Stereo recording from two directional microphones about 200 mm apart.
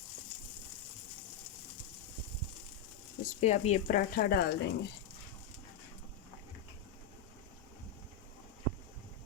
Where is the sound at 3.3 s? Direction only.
35° left (ahead or behind).